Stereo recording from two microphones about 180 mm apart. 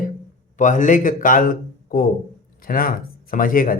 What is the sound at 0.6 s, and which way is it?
Speech, 45° left (ahead or behind).